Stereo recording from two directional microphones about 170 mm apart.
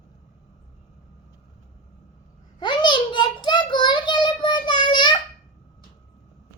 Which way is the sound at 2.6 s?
25° left (ahead or behind).